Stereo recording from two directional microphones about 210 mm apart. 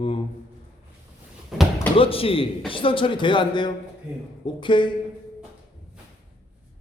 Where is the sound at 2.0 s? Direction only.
25° left (ahead or behind).